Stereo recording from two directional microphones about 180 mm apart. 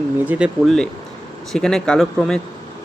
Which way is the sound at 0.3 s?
5° right (ahead or behind).